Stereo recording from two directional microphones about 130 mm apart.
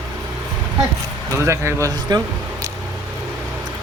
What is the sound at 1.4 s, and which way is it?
Speech, 20° right (ahead or behind).